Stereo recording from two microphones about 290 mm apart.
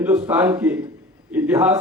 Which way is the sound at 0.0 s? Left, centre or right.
Centre.